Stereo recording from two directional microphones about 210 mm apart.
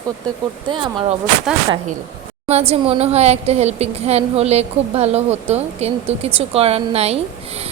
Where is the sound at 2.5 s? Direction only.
30° right (ahead or behind).